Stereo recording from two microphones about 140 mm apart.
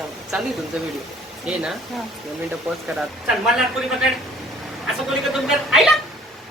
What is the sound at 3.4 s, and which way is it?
Speech, centre (ahead or behind).